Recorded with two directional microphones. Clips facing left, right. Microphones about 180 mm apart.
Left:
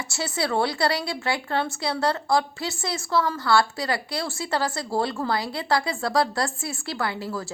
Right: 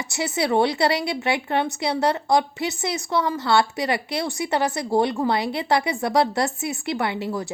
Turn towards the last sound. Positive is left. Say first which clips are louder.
# right 3 dB
turn(degrees=-20)  # may be behind; listen again after turning